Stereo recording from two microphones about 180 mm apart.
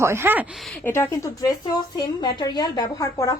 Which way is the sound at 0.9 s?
15° left (ahead or behind).